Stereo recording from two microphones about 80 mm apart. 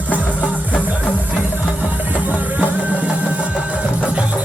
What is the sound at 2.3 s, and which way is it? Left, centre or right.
Music, centre.